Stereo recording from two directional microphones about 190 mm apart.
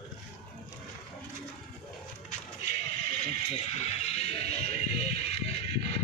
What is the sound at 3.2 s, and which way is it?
Speech, 35° left (ahead or behind).